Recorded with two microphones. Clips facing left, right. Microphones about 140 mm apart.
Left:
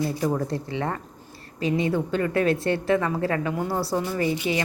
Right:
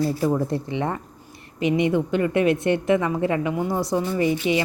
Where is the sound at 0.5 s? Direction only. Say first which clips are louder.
Right 3 dB; 20° right (ahead or behind).